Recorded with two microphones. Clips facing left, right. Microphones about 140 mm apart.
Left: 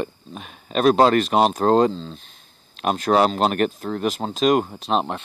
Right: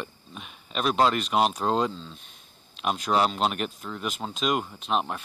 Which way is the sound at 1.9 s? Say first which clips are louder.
Left 8 dB; 30° left (ahead or behind).